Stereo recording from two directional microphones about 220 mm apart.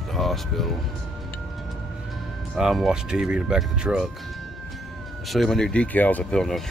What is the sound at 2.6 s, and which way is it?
Speech, centre (ahead or behind).